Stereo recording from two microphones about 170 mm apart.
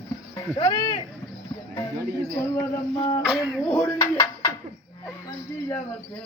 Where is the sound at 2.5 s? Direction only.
20° left (ahead or behind).